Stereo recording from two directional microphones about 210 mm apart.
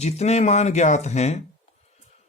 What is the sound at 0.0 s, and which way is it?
Speech, 30° left (ahead or behind).